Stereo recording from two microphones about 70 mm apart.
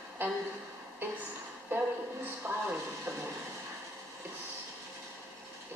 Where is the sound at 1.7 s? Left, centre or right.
Right.